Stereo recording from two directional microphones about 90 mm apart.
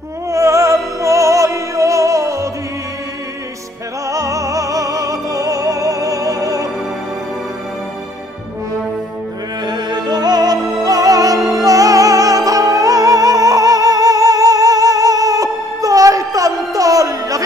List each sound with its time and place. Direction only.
0.3 s music: 35° right (ahead or behind)
4.1 s music: 35° right (ahead or behind)
9.7 s music: 50° right (ahead or behind)